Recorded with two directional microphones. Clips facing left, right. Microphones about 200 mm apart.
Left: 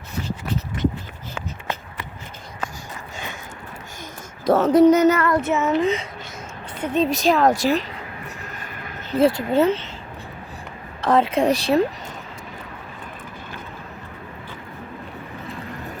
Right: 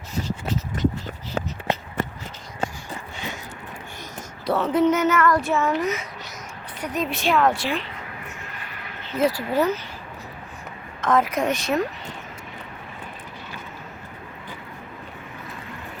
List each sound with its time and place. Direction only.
2.0 s a sound: 45° right (ahead or behind)
2.6 s a sound: 25° right (ahead or behind)
4.4 s a woman's voice: 45° left (ahead or behind)
5.3 s a woman's voice: 20° left (ahead or behind); by 7.9 s 40° left (ahead or behind)
9.1 s speech: 25° left (ahead or behind)
11.0 s a woman's voice: 30° left (ahead or behind)